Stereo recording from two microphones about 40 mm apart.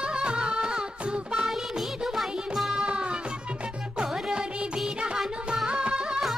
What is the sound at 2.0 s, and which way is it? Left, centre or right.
Music, centre.